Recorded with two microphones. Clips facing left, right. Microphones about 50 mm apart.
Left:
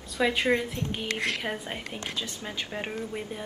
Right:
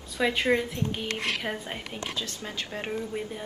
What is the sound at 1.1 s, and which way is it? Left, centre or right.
Speech, left.